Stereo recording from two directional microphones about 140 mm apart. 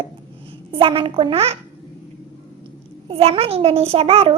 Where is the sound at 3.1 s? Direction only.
45° right (ahead or behind).